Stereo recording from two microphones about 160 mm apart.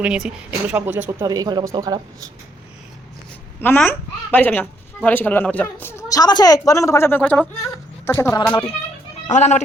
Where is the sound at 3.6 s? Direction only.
15° left (ahead or behind).